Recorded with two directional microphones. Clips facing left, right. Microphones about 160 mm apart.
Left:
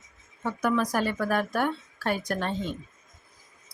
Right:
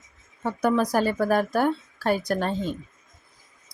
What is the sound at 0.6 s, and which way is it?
Speech, 35° right (ahead or behind).